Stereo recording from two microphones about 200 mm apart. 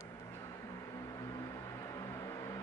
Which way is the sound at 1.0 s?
15° left (ahead or behind).